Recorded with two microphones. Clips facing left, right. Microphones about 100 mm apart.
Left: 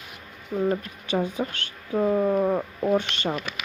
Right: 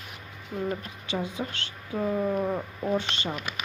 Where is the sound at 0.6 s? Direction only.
45° left (ahead or behind).